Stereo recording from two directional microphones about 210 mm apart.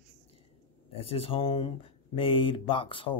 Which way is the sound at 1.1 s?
25° left (ahead or behind).